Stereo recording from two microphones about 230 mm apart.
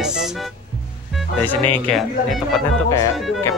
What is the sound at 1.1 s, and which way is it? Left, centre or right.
Speech, centre.